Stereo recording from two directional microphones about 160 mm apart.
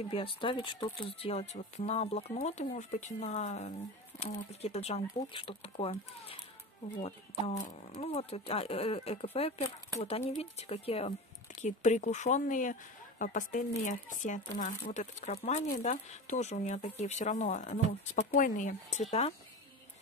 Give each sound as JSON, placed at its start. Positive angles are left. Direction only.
{"t": 0.1, "sound": "speech", "side_deg": 35}